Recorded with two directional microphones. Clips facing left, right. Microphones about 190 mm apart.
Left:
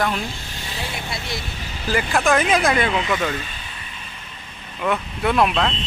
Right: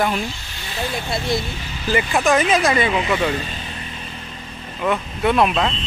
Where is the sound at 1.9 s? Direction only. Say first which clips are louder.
Right 2 dB; centre (ahead or behind).